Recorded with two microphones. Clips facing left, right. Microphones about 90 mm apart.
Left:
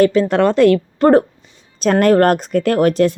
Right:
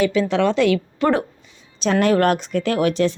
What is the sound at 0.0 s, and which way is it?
A woman's voice, 45° left (ahead or behind).